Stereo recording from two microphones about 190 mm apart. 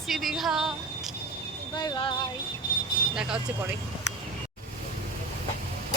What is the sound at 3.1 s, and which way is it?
Speech, 5° right (ahead or behind).